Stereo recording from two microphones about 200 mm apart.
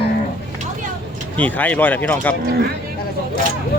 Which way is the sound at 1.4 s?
10° left (ahead or behind).